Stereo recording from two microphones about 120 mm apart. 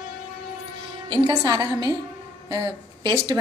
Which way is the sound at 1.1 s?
35° right (ahead or behind).